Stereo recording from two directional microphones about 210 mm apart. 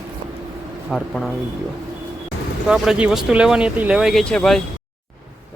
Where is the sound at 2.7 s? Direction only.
5° right (ahead or behind).